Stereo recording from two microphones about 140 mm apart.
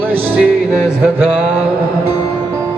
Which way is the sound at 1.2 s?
10° right (ahead or behind).